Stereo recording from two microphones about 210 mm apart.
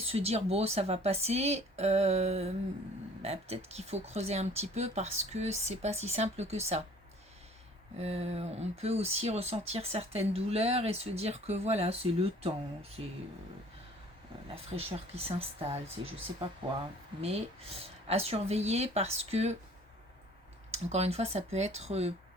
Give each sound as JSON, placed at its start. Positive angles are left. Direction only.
{"t": 0.1, "sound": "speech", "side_deg": -30}
{"t": 7.9, "sound": "speech", "side_deg": -30}
{"t": 14.5, "sound": "speech", "side_deg": -30}
{"t": 18.1, "sound": "speech", "side_deg": -30}
{"t": 20.7, "sound": "speech", "side_deg": -30}